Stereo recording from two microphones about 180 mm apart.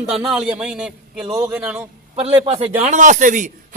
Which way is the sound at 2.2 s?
35° right (ahead or behind).